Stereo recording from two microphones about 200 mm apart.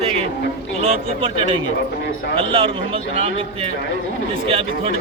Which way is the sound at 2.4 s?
25° right (ahead or behind).